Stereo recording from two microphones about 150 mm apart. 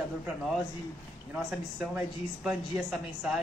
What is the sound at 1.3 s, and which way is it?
Speech, 10° right (ahead or behind).